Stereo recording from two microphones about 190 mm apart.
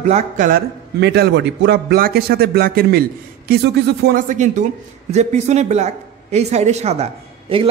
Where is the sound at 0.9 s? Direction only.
60° right (ahead or behind).